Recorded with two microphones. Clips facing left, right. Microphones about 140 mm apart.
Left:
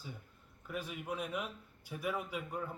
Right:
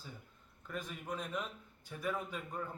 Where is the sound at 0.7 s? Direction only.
10° left (ahead or behind).